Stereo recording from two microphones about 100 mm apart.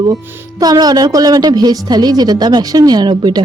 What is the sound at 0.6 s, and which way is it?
A woman's voice, 40° right (ahead or behind).